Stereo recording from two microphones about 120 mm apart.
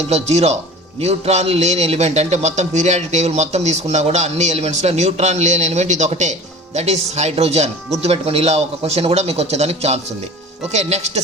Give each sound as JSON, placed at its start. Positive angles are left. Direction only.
{"t": 0.1, "sound": "a man's voice", "side_deg": -65}
{"t": 6.7, "sound": "a man's voice", "side_deg": -65}